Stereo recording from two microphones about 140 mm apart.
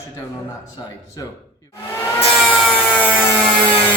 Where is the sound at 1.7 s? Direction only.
20° left (ahead or behind).